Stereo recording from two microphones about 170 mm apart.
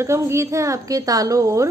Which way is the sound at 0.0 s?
15° right (ahead or behind).